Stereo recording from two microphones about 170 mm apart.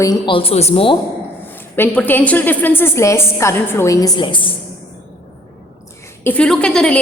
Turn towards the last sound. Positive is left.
turn(degrees=5)  # may be behind; listen again after turning